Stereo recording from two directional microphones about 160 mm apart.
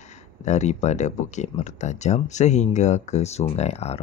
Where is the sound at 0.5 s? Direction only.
45° left (ahead or behind).